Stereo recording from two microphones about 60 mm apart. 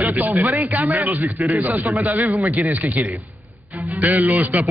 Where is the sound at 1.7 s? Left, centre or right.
Right.